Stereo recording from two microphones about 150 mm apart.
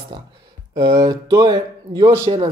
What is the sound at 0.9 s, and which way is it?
Speech, 20° right (ahead or behind).